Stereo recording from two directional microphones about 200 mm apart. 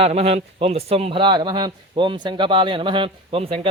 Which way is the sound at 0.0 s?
30° right (ahead or behind).